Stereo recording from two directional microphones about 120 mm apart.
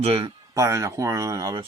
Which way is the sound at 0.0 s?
55° right (ahead or behind).